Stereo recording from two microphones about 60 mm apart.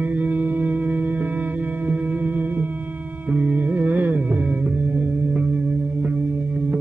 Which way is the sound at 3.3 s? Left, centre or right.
Right.